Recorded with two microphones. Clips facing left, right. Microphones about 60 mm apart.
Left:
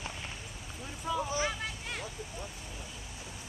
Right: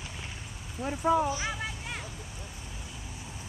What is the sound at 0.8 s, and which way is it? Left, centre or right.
Speech, right.